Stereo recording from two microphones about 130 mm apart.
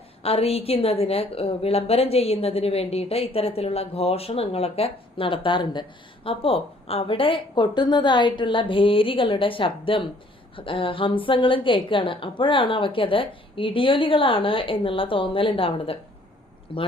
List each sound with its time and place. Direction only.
0.2 s a woman's voice: 50° left (ahead or behind)